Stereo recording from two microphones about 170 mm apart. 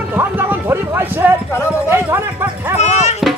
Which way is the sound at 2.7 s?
40° left (ahead or behind).